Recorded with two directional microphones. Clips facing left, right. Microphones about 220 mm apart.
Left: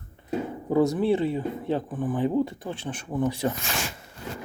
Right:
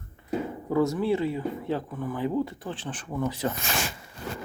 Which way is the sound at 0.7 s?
20° left (ahead or behind).